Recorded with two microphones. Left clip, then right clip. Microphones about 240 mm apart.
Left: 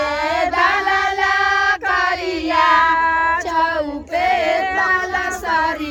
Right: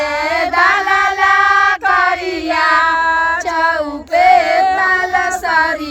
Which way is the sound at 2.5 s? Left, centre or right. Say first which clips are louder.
Right 1 dB; right.